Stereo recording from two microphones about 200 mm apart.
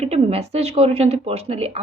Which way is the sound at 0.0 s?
30° right (ahead or behind).